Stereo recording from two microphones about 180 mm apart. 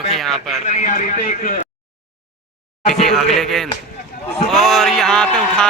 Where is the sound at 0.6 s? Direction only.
45° left (ahead or behind).